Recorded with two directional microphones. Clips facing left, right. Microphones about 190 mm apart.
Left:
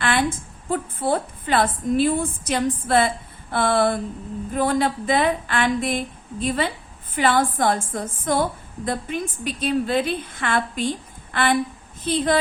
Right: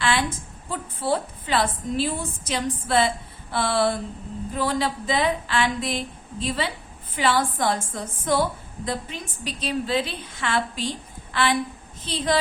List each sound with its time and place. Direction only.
0.0 s a woman's voice: 55° left (ahead or behind)